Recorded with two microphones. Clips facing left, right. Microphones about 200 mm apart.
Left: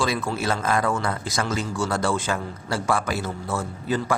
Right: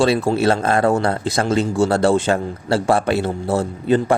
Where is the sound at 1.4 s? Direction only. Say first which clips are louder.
Right 8 dB; 30° right (ahead or behind).